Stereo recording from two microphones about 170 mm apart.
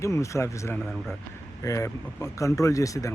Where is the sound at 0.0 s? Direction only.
15° left (ahead or behind).